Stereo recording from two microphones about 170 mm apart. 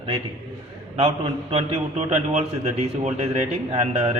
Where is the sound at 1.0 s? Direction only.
35° right (ahead or behind).